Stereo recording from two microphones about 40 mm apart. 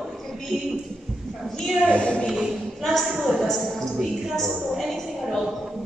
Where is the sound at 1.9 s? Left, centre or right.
Left.